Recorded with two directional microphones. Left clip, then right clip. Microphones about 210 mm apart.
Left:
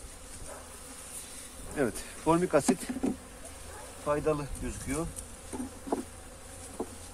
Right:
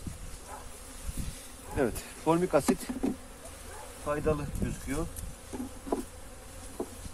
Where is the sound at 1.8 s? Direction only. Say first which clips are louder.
Right 1 dB; 15° right (ahead or behind).